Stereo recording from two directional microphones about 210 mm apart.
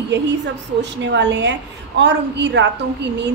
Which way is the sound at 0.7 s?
55° right (ahead or behind).